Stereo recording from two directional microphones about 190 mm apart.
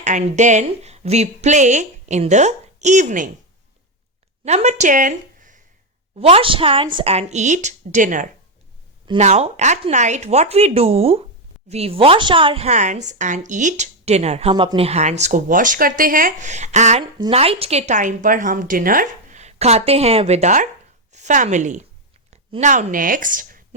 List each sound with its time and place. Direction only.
0.0 s a woman's voice: 40° right (ahead or behind)
4.4 s a woman's voice: 35° right (ahead or behind)
6.1 s a woman's voice: 30° right (ahead or behind)
17.0 s a woman's voice: 25° right (ahead or behind); by 23.6 s 45° right (ahead or behind)